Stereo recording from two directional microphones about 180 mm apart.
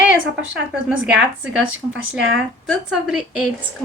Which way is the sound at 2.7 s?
5° right (ahead or behind).